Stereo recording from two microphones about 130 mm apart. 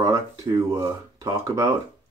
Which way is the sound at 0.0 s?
25° right (ahead or behind).